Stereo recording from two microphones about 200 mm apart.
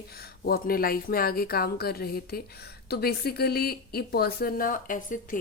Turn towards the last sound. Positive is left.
turn(degrees=40)  # may be behind; listen again after turning